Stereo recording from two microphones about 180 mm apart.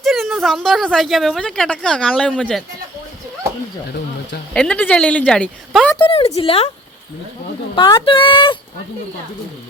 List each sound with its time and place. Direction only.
0.0 s a woman's voice: centre (ahead or behind)
4.5 s a woman's voice: 5° left (ahead or behind)
6.0 s a woman's voice: 30° left (ahead or behind)
7.8 s speech: 30° left (ahead or behind)